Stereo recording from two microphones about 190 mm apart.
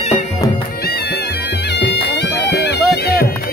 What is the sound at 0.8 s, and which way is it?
Bagpipes, 55° left (ahead or behind).